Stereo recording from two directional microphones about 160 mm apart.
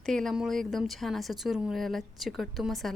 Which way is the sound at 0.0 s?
Centre (ahead or behind).